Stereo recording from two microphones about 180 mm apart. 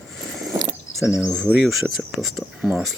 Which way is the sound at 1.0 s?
Centre (ahead or behind).